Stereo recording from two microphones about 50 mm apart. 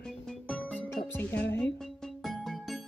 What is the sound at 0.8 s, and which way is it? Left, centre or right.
Music, left.